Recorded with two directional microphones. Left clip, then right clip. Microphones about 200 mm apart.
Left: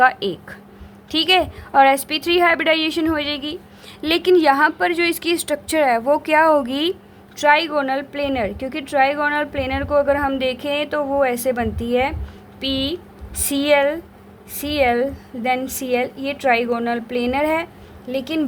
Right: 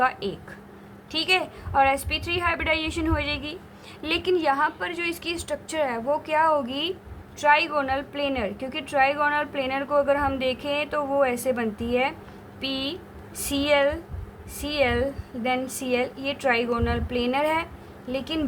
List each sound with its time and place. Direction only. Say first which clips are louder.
0.0 s a woman's voice: left 8 dB; 35° left (ahead or behind)